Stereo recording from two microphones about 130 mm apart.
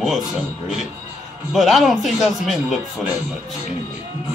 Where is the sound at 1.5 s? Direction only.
Centre (ahead or behind).